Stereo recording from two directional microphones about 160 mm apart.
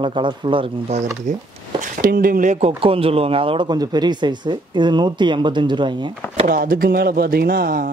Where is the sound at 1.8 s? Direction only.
60° right (ahead or behind).